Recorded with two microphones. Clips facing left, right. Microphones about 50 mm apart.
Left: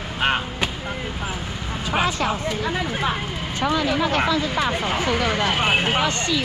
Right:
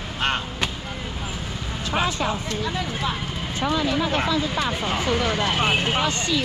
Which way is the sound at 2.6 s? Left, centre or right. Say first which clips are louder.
Left 3 dB; left.